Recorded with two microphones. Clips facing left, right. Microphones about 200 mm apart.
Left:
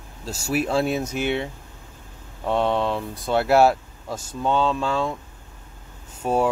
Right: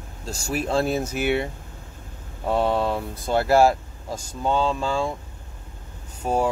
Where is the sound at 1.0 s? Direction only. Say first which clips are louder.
Right 1 dB; 10° right (ahead or behind).